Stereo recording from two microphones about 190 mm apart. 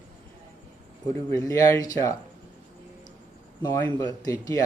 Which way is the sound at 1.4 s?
15° left (ahead or behind).